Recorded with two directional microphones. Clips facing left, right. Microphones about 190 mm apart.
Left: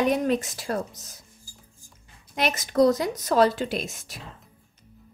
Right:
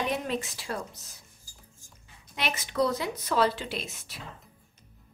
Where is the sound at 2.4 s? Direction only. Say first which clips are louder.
Left 7 dB; 45° left (ahead or behind).